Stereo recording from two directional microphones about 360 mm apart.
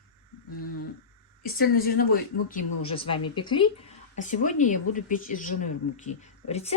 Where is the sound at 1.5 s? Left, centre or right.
Left.